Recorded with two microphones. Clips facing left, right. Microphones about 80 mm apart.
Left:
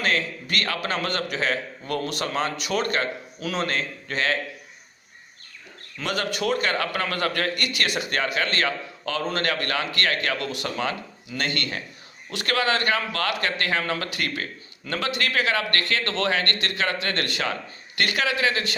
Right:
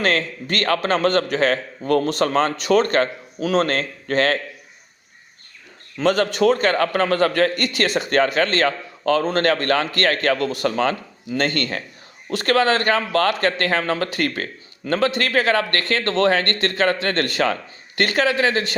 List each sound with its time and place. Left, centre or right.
0.0 s a man's voice: right
6.0 s a man's voice: right